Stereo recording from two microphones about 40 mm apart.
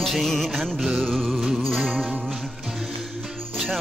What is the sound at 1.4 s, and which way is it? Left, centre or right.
Music, centre.